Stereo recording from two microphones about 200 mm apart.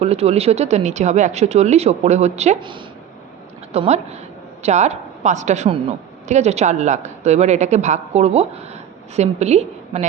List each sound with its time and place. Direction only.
0.0 s speech: 30° right (ahead or behind)